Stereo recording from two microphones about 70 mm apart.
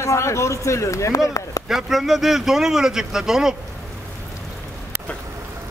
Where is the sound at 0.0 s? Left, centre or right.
Left.